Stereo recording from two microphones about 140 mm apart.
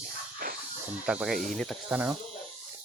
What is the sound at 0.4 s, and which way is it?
Dog, 90° right.